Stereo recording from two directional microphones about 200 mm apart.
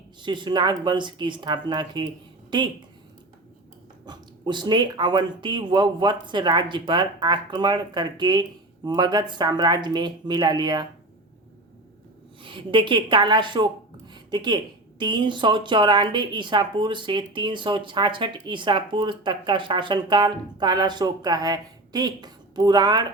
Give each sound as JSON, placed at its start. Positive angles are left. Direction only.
{"t": 0.2, "sound": "speech", "side_deg": -25}
{"t": 4.0, "sound": "speech", "side_deg": -20}
{"t": 12.4, "sound": "speech", "side_deg": -25}